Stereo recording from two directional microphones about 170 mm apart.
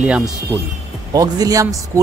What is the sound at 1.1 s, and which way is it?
Speech, 20° right (ahead or behind).